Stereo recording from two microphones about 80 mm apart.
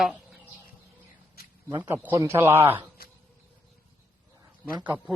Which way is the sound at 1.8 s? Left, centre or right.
Right.